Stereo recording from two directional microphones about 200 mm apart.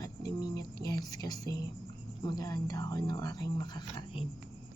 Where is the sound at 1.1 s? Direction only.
20° left (ahead or behind).